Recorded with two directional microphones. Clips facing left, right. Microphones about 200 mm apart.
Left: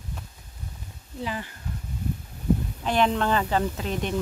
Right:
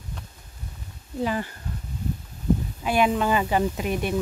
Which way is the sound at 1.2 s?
50° right (ahead or behind).